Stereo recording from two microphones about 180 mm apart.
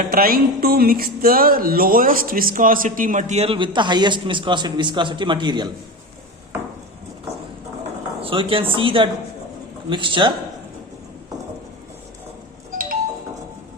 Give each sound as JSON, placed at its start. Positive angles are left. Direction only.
{"t": 0.0, "sound": "music", "side_deg": -55}
{"t": 8.2, "sound": "speech", "side_deg": -30}